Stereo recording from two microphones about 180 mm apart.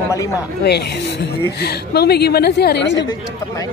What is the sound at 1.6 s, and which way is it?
A woman's voice, 65° left (ahead or behind).